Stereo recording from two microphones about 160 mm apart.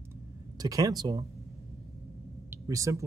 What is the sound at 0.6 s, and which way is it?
Speech, 25° right (ahead or behind).